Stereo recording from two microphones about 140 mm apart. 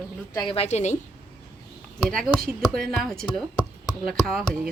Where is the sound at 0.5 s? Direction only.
50° left (ahead or behind).